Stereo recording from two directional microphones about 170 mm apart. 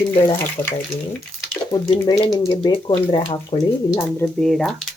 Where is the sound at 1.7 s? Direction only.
20° left (ahead or behind).